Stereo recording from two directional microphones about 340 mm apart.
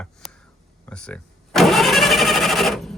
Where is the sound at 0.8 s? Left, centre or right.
Centre.